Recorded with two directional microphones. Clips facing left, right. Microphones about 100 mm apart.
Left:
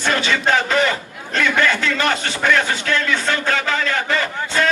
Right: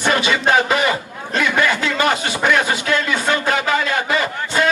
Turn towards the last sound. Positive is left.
turn(degrees=-15)  # may be behind; listen again after turning